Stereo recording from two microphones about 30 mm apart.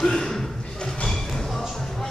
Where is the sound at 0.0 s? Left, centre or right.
Centre.